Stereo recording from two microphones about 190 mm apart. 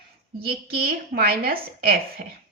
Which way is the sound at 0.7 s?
55° right (ahead or behind).